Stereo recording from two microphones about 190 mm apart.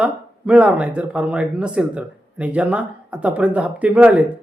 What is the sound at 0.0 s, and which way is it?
Speech, 5° right (ahead or behind).